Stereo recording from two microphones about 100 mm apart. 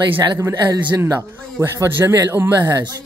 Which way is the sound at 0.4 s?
30° right (ahead or behind).